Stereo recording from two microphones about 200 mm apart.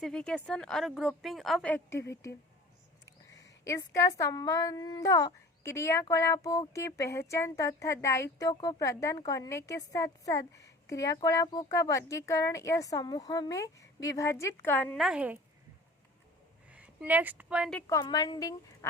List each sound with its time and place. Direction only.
0.0 s a woman's voice: 5° left (ahead or behind)
3.1 s speech: 15° left (ahead or behind)
15.0 s speech: 5° right (ahead or behind)
16.6 s speech: 5° right (ahead or behind)
17.7 s speech: 15° left (ahead or behind)